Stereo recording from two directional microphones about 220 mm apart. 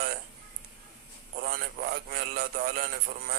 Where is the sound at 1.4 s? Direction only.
45° right (ahead or behind).